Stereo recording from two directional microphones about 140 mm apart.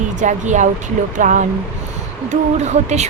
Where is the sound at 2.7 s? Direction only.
55° right (ahead or behind).